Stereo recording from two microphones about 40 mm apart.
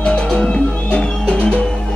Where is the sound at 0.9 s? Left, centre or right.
Left.